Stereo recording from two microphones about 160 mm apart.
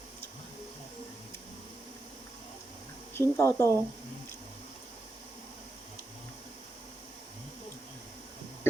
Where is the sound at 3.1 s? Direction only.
15° left (ahead or behind).